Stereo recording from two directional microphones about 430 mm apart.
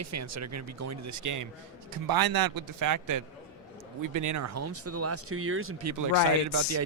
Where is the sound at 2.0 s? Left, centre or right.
Right.